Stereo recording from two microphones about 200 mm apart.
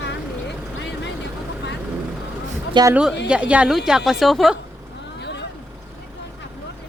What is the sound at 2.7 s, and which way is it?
Speech, 20° right (ahead or behind).